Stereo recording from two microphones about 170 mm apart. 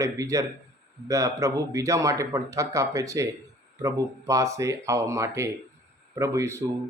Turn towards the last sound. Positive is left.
turn(degrees=-15)  # may be behind; listen again after turning